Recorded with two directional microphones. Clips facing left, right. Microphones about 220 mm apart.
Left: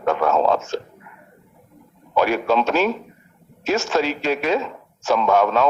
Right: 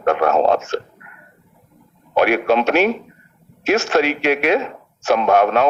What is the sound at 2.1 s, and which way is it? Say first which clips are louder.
Speech: right 3 dB; 70° right (ahead or behind).